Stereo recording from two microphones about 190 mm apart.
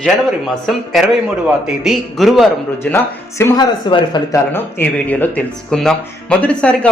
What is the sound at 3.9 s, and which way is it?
Speech, 25° left (ahead or behind).